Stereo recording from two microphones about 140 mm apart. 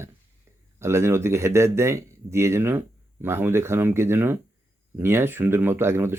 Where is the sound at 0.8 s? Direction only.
20° right (ahead or behind).